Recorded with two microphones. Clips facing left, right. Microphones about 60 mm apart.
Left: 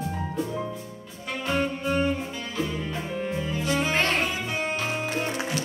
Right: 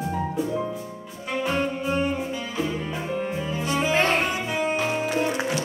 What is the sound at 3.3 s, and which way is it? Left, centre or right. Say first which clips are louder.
Music: right 1 dB; centre.